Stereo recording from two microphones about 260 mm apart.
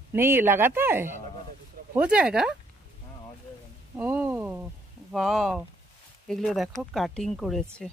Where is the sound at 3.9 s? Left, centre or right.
Centre.